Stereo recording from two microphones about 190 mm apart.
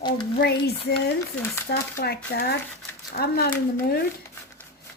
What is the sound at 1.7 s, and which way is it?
A woman's voice, 55° left (ahead or behind).